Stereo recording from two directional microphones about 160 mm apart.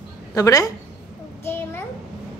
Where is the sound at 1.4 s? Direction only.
15° left (ahead or behind).